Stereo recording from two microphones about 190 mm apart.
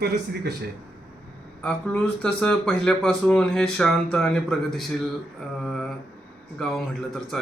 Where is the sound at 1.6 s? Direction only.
5° left (ahead or behind).